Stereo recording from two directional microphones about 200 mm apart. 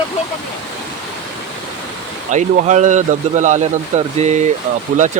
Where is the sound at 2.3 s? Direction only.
35° right (ahead or behind).